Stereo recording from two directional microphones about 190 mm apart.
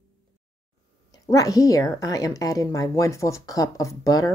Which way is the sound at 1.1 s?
20° left (ahead or behind).